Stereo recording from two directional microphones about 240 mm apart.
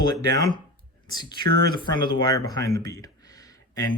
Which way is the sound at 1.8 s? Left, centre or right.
Centre.